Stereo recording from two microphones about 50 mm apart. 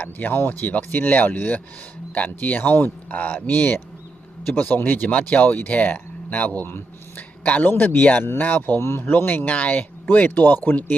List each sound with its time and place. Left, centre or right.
0.0 s speech: left
7.2 s a sound: left
7.7 s speech: left